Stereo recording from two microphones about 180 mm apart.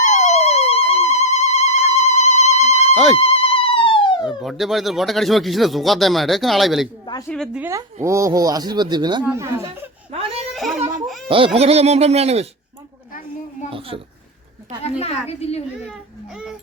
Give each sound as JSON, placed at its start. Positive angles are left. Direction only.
{"t": 0.1, "sound": "a sound", "side_deg": 40}
{"t": 2.9, "sound": "speech", "side_deg": 0}
{"t": 3.2, "sound": "mosquito", "side_deg": 35}
{"t": 4.3, "sound": "speech", "side_deg": 0}
{"t": 7.6, "sound": "speech", "side_deg": -15}
{"t": 9.2, "sound": "speech", "side_deg": -15}
{"t": 10.1, "sound": "baby cry", "side_deg": -35}
{"t": 10.5, "sound": "a sound", "side_deg": 0}
{"t": 11.3, "sound": "speech", "side_deg": -30}
{"t": 13.7, "sound": "a sound", "side_deg": -30}
{"t": 14.8, "sound": "a woman's voice", "side_deg": 35}